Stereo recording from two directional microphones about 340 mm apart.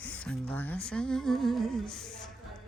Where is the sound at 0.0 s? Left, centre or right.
Centre.